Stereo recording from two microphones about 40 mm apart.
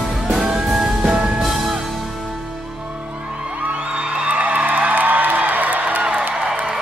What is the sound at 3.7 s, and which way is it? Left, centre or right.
Music, right.